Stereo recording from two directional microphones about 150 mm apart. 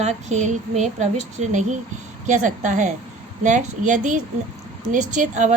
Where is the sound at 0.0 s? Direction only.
50° right (ahead or behind).